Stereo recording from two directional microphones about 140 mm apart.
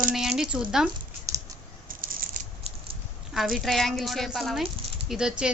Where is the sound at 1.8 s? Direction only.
85° right.